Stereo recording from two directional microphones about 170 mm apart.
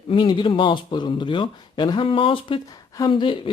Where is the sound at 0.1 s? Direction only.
30° left (ahead or behind).